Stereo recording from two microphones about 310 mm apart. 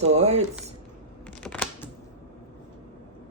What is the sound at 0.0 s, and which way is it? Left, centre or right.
Speech, right.